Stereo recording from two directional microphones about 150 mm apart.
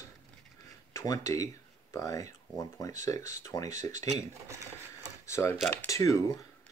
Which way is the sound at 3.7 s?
50° right (ahead or behind).